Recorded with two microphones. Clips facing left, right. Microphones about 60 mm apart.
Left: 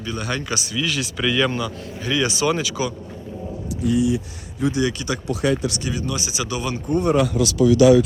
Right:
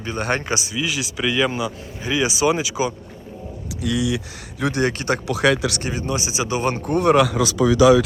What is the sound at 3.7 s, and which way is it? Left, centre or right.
Speech, right.